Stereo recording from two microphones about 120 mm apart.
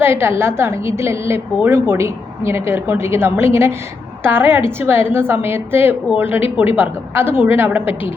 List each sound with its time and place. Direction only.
0.0 s a woman's voice: 20° right (ahead or behind)